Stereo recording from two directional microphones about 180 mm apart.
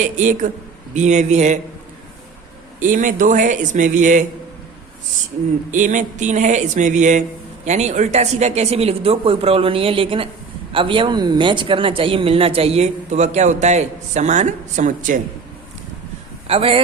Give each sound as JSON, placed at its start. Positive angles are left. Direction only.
{"t": 0.0, "sound": "speech", "side_deg": -45}
{"t": 2.8, "sound": "speech", "side_deg": -45}
{"t": 5.7, "sound": "speech", "side_deg": -45}
{"t": 16.5, "sound": "speech", "side_deg": -30}